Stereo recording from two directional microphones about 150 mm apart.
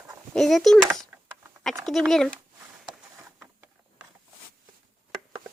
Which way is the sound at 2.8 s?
5° right (ahead or behind).